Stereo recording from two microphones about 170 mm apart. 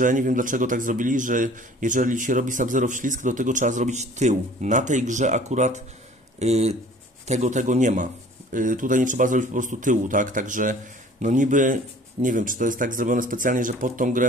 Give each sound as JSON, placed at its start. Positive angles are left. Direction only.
{"t": 0.0, "sound": "speech", "side_deg": -50}